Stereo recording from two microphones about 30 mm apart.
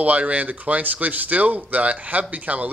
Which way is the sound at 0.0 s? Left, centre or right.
Right.